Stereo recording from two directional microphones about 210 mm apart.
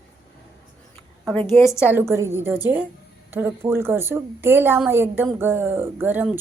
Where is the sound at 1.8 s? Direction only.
10° right (ahead or behind).